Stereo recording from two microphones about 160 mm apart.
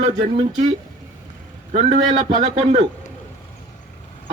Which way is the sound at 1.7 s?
35° right (ahead or behind).